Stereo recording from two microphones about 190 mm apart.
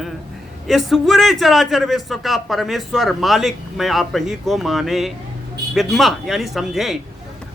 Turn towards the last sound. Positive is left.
turn(degrees=0)  # may be behind; listen again after turning